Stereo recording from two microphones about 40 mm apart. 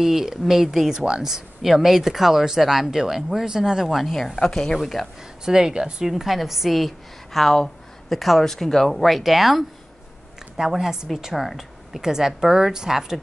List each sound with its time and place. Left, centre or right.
0.0 s speech: centre
3.9 s speech: centre
4.4 s a woman's voice: centre
5.0 s speech: centre
5.4 s speech: centre
11.3 s speech: centre